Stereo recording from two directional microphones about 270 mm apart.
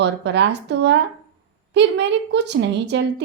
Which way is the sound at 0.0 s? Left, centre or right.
Right.